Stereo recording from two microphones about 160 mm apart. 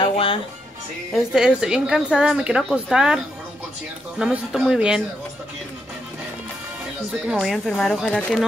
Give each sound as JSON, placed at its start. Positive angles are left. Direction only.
{"t": 0.0, "sound": "music", "side_deg": 35}
{"t": 1.1, "sound": "a woman's voice", "side_deg": -5}
{"t": 4.2, "sound": "a woman's voice", "side_deg": -5}
{"t": 7.3, "sound": "a woman's voice", "side_deg": 0}